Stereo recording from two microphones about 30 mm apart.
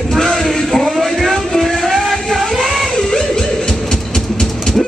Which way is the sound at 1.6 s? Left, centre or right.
Centre.